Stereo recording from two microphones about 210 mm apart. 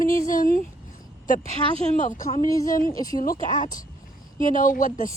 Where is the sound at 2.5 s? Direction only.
15° left (ahead or behind).